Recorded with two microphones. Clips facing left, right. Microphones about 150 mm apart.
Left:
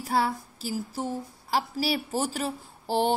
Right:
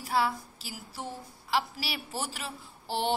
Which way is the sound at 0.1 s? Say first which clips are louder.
Left 2 dB; 45° left (ahead or behind).